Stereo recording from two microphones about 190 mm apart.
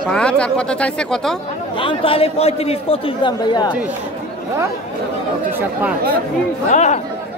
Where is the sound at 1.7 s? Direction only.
25° left (ahead or behind).